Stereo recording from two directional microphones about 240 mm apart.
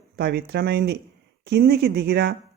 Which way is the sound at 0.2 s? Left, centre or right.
Right.